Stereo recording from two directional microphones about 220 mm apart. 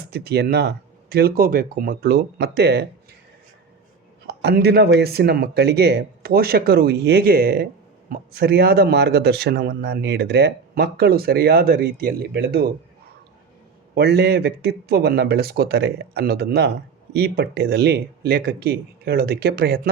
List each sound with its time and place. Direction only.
0.0 s a man's voice: 45° right (ahead or behind)
4.4 s a man's voice: 45° right (ahead or behind)
13.9 s a man's voice: 50° right (ahead or behind)